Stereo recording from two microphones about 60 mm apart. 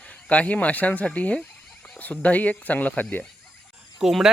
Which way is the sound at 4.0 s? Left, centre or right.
Centre.